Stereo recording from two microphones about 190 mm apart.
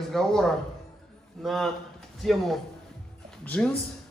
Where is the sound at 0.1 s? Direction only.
Centre (ahead or behind).